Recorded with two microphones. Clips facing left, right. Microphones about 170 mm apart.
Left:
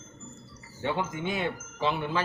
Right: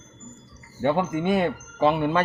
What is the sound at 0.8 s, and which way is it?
Speech, 55° right (ahead or behind).